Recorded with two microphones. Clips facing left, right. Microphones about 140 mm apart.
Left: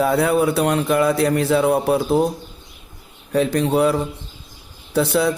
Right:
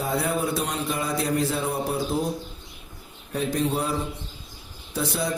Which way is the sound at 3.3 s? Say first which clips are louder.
Left 7 dB; 75° left (ahead or behind).